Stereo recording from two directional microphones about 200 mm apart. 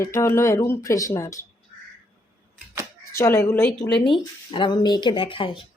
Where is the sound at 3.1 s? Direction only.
15° left (ahead or behind).